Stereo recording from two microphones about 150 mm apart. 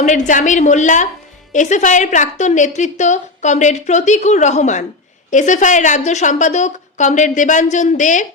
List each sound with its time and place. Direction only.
0.0 s a woman's voice: 55° left (ahead or behind)